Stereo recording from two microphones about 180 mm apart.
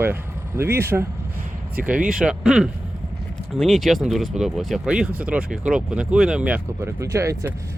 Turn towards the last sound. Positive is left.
turn(degrees=-15)  # may be behind; listen again after turning